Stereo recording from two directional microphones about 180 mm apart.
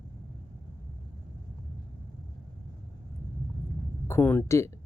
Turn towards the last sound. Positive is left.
turn(degrees=15)  # may be behind; listen again after turning